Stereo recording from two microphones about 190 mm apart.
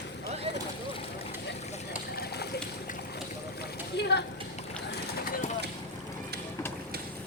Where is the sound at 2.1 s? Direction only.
55° left (ahead or behind).